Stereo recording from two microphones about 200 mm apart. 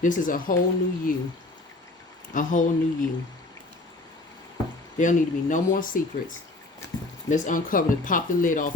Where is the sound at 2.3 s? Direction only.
40° left (ahead or behind).